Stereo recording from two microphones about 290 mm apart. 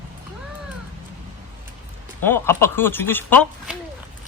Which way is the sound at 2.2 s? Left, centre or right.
Centre.